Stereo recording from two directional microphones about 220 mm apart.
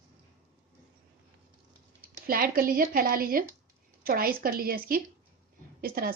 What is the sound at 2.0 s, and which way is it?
Speech, 40° right (ahead or behind).